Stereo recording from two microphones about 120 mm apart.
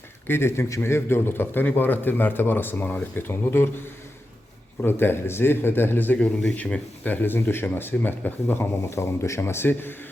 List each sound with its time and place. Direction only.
0.3 s a man's voice: 20° left (ahead or behind)